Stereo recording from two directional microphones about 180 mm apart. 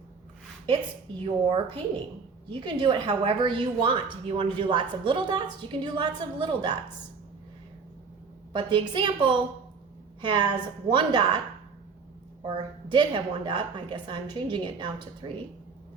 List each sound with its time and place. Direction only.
1.2 s a woman's voice: 25° right (ahead or behind)
8.5 s a woman's voice: 25° right (ahead or behind)
12.4 s a woman's voice: 25° right (ahead or behind)